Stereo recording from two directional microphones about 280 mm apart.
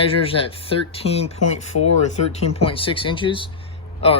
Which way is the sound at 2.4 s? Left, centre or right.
Left.